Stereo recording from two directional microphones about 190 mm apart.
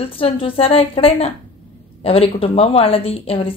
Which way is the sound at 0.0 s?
30° left (ahead or behind).